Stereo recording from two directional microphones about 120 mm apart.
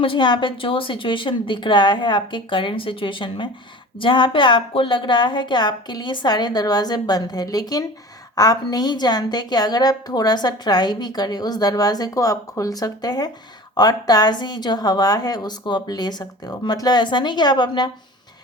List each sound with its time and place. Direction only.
0.0 s a woman's voice: 45° left (ahead or behind)